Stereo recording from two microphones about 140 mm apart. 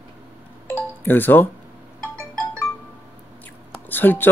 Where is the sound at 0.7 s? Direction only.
10° left (ahead or behind).